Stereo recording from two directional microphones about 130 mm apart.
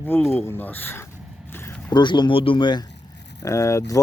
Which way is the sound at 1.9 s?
35° left (ahead or behind).